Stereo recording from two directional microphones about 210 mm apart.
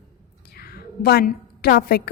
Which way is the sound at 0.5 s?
45° left (ahead or behind).